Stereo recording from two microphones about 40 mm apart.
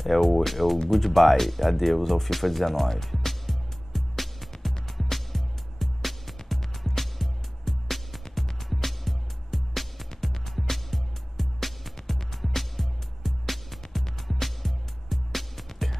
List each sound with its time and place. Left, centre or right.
0.0 s speech: centre
4.8 s music: centre